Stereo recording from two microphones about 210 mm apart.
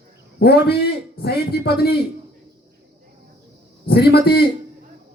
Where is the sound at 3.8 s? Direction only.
50° left (ahead or behind).